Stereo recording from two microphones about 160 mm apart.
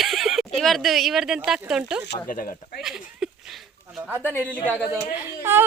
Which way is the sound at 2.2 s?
60° left (ahead or behind).